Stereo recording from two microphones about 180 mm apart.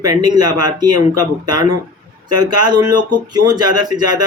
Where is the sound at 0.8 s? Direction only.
20° right (ahead or behind).